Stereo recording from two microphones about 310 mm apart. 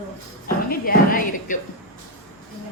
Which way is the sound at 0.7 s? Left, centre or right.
Left.